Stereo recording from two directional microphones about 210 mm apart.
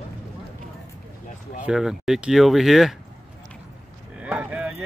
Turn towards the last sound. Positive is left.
turn(degrees=-5)  # may be behind; listen again after turning